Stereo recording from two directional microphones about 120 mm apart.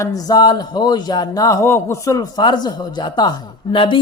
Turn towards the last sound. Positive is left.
turn(degrees=45)  # may be behind; listen again after turning